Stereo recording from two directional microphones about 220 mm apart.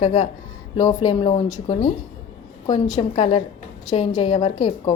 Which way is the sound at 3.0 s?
25° left (ahead or behind).